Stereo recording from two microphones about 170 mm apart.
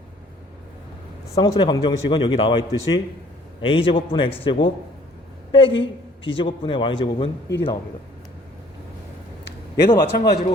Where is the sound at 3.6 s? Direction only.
30° left (ahead or behind).